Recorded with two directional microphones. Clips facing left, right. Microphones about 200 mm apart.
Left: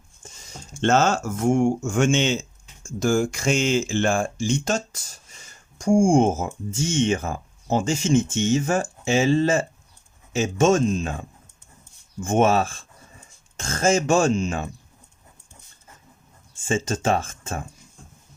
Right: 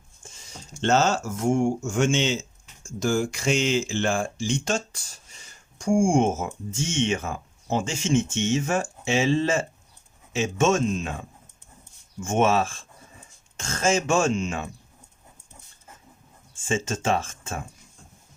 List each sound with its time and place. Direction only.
0.8 s speech: 55° left (ahead or behind); by 14.7 s 35° left (ahead or behind)
16.6 s speech: 35° left (ahead or behind)